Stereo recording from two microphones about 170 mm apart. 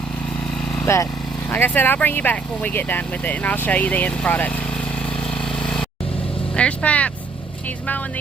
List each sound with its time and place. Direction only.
0.9 s speech: 15° left (ahead or behind)
6.6 s speech: 10° left (ahead or behind)